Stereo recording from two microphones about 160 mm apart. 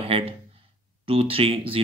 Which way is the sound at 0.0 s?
35° right (ahead or behind).